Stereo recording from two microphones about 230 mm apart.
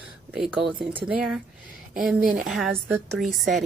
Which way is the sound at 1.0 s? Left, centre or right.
Centre.